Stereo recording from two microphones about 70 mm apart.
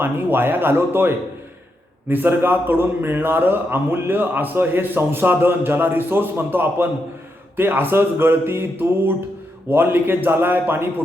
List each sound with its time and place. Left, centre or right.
0.0 s a man's voice: right